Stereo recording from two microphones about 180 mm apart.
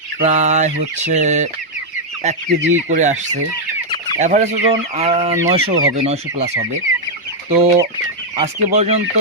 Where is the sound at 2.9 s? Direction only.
40° right (ahead or behind).